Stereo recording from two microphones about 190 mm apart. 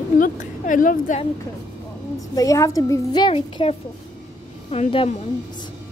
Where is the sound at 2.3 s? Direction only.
15° left (ahead or behind).